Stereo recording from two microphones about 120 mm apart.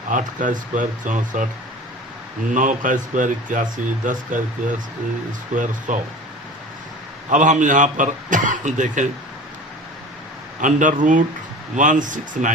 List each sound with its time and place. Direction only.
0.1 s speech: 90° right
2.5 s speech: 90° right
5.5 s speech: 90° right
7.3 s speech: 90° right
10.6 s speech: 90° right